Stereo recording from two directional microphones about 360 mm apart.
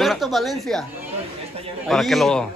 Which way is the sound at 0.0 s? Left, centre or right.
Centre.